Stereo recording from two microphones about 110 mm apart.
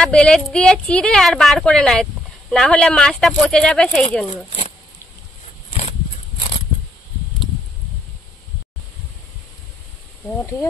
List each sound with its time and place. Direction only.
0.0 s speech: 10° left (ahead or behind)
4.5 s speech: 75° left (ahead or behind)
5.7 s a sound: 65° left (ahead or behind)